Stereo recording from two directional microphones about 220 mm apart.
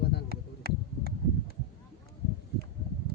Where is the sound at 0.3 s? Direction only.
45° right (ahead or behind).